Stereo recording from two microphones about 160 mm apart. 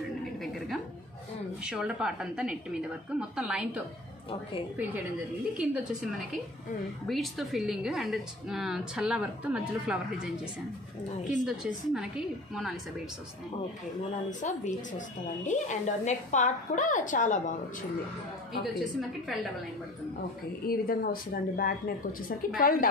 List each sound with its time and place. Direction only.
1.6 s a woman's voice: 5° right (ahead or behind)
5.6 s a woman's voice: centre (ahead or behind)
14.4 s a woman's voice: 50° left (ahead or behind)
20.6 s a woman's voice: 65° left (ahead or behind)